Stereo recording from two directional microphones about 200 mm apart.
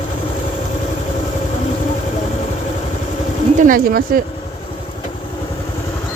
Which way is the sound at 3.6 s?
45° right (ahead or behind).